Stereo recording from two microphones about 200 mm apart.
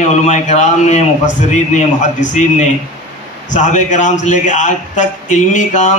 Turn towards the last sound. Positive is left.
turn(degrees=40)  # may be behind; listen again after turning